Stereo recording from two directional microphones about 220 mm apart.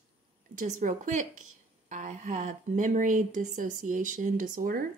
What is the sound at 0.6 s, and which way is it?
A woman's voice, 35° right (ahead or behind).